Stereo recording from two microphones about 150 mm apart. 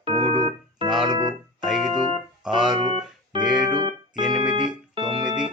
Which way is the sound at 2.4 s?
5° right (ahead or behind).